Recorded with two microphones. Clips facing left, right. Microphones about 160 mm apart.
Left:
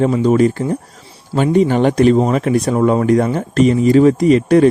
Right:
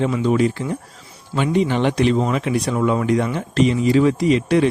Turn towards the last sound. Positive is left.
turn(degrees=45)  # may be behind; listen again after turning